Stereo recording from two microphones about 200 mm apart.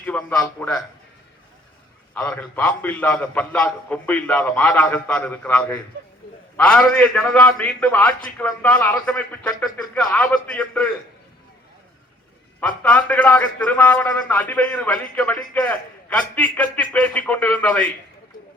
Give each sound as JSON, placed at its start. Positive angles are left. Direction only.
{"t": 0.0, "sound": "a man's voice", "side_deg": 10}
{"t": 2.1, "sound": "a man's voice", "side_deg": 5}
{"t": 12.5, "sound": "a man's voice", "side_deg": 5}